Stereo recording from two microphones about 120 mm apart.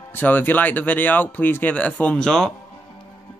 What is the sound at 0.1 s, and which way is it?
Speech, 15° left (ahead or behind).